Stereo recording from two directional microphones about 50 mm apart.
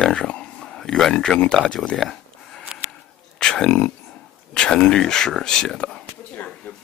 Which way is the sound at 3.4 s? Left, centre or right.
Centre.